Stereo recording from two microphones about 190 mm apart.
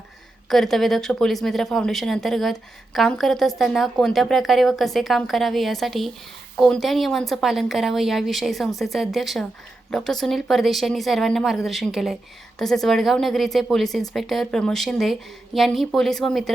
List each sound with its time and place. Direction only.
0.4 s speech: centre (ahead or behind)